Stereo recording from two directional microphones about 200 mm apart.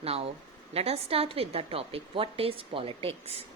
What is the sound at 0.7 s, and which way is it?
A woman's voice, 30° right (ahead or behind).